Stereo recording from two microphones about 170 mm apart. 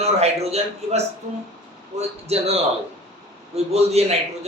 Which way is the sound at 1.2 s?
50° right (ahead or behind).